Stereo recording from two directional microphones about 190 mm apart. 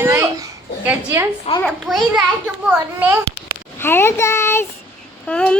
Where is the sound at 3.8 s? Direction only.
10° left (ahead or behind).